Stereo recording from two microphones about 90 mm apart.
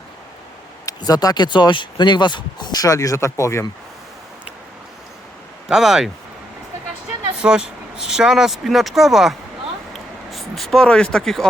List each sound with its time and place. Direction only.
0.9 s speech: 45° left (ahead or behind)
5.6 s speech: 5° right (ahead or behind)
7.4 s speech: 10° right (ahead or behind)
10.3 s speech: centre (ahead or behind)